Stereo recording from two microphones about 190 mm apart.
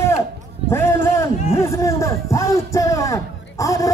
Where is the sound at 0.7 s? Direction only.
10° left (ahead or behind).